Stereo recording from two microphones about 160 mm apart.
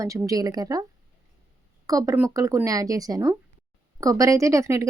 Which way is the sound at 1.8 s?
20° right (ahead or behind).